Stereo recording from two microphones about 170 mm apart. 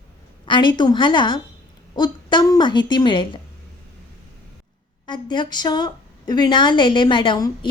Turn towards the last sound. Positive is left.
turn(degrees=25)  # may be behind; listen again after turning